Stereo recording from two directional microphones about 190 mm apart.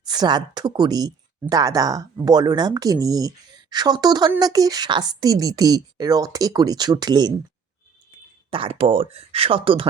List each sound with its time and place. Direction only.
0.0 s speech: 20° right (ahead or behind)
8.4 s speech: 30° right (ahead or behind)